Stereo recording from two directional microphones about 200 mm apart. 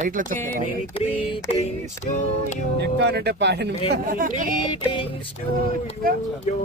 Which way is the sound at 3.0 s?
55° right (ahead or behind).